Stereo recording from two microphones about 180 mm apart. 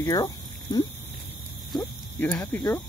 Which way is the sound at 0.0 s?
20° left (ahead or behind).